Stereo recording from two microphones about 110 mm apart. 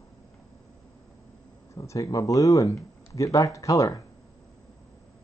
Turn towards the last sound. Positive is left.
turn(degrees=30)  # may be behind; listen again after turning